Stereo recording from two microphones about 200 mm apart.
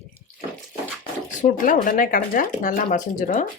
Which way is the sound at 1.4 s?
40° left (ahead or behind).